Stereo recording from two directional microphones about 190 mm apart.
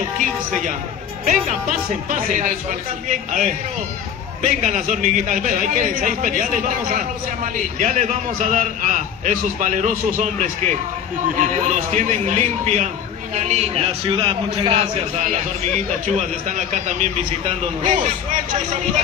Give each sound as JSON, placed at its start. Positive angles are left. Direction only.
{"t": 1.2, "sound": "a man's voice", "side_deg": -40}
{"t": 7.5, "sound": "a man's voice", "side_deg": -40}
{"t": 16.4, "sound": "a man's voice", "side_deg": -40}